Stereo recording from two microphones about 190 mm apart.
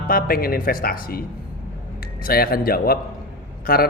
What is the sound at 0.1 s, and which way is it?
A man's voice, 50° left (ahead or behind).